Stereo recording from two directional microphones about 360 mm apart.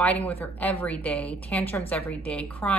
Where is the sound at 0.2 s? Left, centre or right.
Centre.